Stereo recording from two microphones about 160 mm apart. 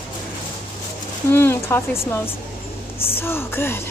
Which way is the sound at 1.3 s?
15° left (ahead or behind).